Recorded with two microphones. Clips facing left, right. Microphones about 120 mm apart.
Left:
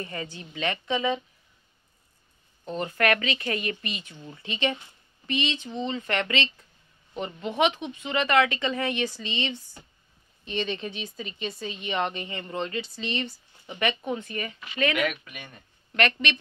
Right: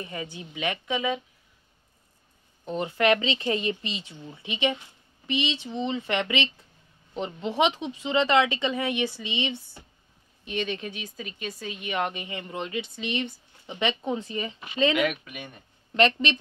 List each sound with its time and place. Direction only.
0.0 s speech: 15° right (ahead or behind)
2.6 s speech: 15° right (ahead or behind)
4.1 s speech: 10° right (ahead or behind)
16.0 s speech: 30° right (ahead or behind)